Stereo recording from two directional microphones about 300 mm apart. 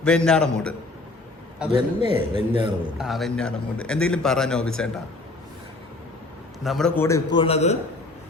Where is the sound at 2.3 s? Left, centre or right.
Centre.